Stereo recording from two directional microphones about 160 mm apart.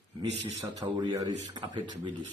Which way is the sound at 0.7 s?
20° right (ahead or behind).